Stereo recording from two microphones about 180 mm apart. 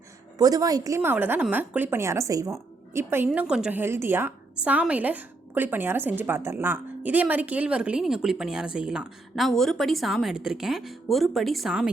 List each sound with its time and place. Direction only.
0.3 s a woman's voice: 20° right (ahead or behind); by 11.9 s centre (ahead or behind)